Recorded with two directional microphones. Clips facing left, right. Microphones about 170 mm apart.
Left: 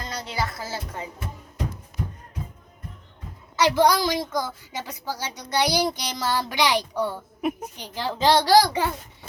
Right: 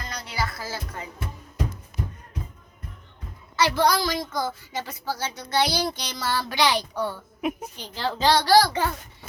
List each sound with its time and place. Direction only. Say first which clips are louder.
0.1 s music: left 1 dB; 25° left (ahead or behind)
3.5 s a woman's voice: left 2 dB; 15° left (ahead or behind)